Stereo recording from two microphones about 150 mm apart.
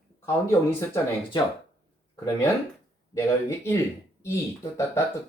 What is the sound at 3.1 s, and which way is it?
Speech, 15° left (ahead or behind).